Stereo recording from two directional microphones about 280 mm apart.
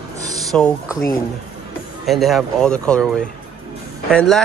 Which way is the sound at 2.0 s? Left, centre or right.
Centre.